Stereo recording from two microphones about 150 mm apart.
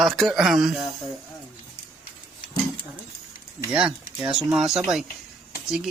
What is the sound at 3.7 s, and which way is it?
Speech, 5° right (ahead or behind).